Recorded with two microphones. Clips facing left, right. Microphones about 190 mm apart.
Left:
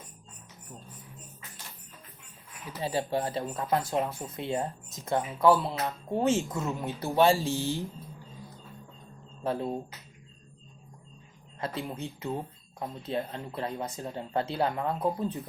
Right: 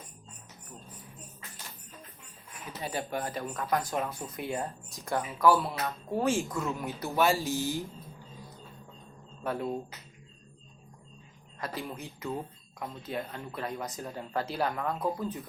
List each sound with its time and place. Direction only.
2.8 s speech: 25° left (ahead or behind)
9.4 s speech: 30° left (ahead or behind)
11.6 s speech: 25° left (ahead or behind)